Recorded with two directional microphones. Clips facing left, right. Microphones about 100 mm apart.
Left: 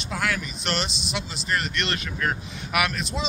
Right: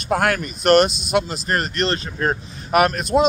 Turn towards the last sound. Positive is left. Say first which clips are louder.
# right 10 dB
turn(degrees=-50)  # may be behind; listen again after turning